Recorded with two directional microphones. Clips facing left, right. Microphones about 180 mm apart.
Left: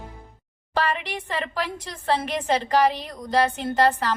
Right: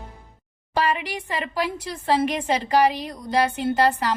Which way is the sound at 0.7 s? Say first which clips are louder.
Right 2 dB; 10° right (ahead or behind).